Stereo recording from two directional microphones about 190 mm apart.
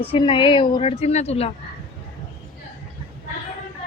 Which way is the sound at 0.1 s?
25° left (ahead or behind).